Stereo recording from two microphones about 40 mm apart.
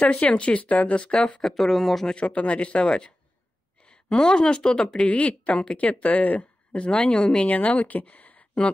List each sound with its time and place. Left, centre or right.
0.0 s speech: left
1.5 s speech: centre
2.1 s a woman's voice: left
4.9 s speech: left
6.9 s speech: left
7.3 s speech: left